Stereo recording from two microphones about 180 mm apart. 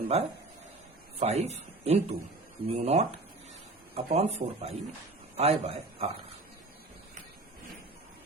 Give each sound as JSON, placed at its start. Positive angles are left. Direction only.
{"t": 0.1, "sound": "a man's voice", "side_deg": -35}